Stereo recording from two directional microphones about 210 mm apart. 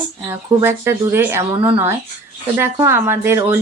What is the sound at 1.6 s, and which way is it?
Speech, 25° right (ahead or behind).